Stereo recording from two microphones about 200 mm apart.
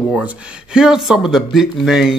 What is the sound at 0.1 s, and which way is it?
Speech, 5° right (ahead or behind).